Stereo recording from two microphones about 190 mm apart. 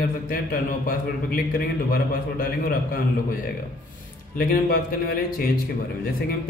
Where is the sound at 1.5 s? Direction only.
50° left (ahead or behind).